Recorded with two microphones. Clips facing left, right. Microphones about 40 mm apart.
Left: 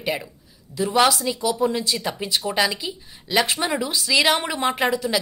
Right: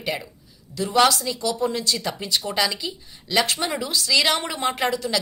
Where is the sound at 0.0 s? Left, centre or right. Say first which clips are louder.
Left 2 dB; centre.